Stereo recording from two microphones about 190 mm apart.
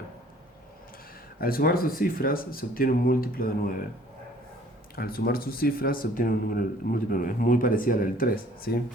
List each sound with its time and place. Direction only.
1.4 s speech: 50° left (ahead or behind)
4.9 s speech: 50° left (ahead or behind)